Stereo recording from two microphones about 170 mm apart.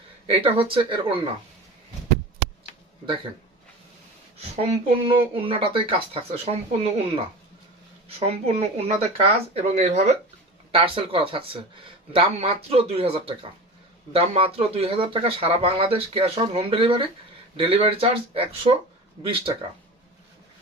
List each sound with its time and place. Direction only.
0.3 s speech: 35° right (ahead or behind)
4.4 s speech: 40° right (ahead or behind)